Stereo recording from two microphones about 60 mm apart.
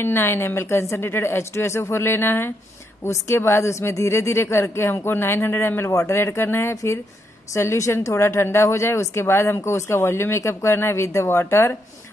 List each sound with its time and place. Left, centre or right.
0.0 s a woman's voice: left
5.9 s a man's voice: left
6.1 s a woman's voice: left
7.5 s a woman's voice: left